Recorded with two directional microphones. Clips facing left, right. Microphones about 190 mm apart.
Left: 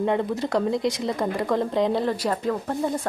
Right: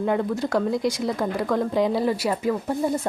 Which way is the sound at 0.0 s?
Centre (ahead or behind).